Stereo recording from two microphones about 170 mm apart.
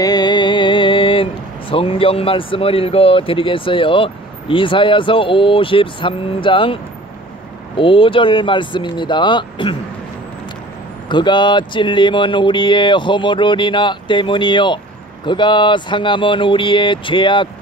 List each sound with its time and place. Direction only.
0.0 s speech: 25° left (ahead or behind)
11.1 s speech: 25° left (ahead or behind)